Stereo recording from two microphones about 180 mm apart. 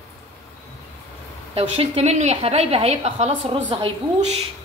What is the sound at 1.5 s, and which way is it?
A woman's voice, 35° right (ahead or behind).